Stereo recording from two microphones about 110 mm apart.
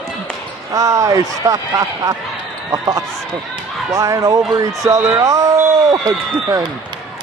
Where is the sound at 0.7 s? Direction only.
30° right (ahead or behind).